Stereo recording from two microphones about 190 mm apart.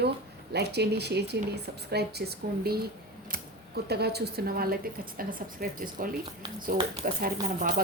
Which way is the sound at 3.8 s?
60° right (ahead or behind).